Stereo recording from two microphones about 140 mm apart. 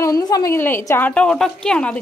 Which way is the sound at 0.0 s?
25° left (ahead or behind).